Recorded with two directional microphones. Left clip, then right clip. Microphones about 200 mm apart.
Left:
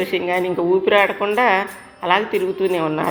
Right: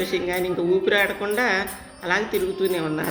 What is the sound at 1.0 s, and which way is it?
Speech, centre (ahead or behind).